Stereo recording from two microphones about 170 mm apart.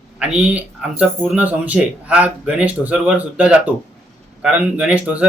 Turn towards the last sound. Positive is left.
turn(degrees=-10)  # may be behind; listen again after turning